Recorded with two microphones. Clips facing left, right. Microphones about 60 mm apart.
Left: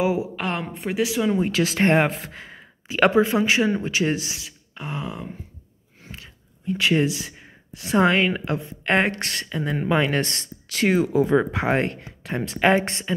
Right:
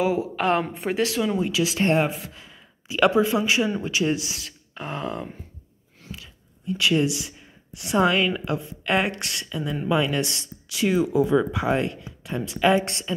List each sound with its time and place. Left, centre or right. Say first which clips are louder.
0.0 s speech: left 1 dB; centre
0.4 s a woman's voice: right 5 dB; centre
1.0 s speech: left 3 dB; centre
1.5 s speech: left 2 dB; left
2.0 s speech: left 2 dB; left
2.2 s speech: left 4 dB; left
4.7 s a woman's voice: right 2 dB; centre
6.1 s speech: left 2 dB; left